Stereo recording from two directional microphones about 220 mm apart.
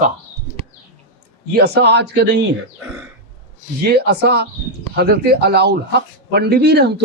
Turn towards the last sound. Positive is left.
turn(degrees=-50)  # may be behind; listen again after turning